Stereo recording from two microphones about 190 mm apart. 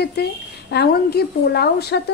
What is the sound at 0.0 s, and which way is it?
A woman's voice, 60° left (ahead or behind).